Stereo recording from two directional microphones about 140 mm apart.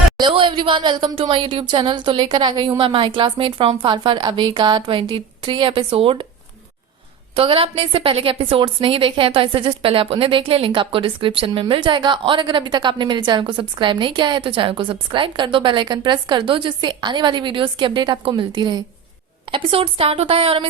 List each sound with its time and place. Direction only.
0.2 s a woman's voice: 35° right (ahead or behind)
7.3 s a woman's voice: 40° right (ahead or behind)